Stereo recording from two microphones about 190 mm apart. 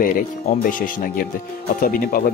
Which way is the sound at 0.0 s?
45° left (ahead or behind).